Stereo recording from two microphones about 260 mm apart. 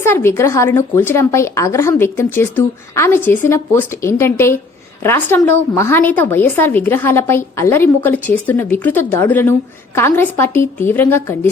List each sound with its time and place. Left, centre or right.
0.0 s a woman's voice: centre